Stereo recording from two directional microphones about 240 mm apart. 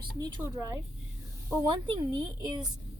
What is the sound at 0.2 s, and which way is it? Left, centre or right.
Speech, centre.